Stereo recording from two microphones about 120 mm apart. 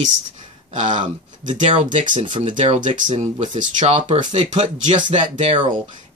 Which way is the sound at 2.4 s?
75° right (ahead or behind).